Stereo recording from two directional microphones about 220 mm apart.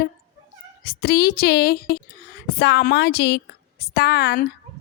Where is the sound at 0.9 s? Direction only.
45° left (ahead or behind).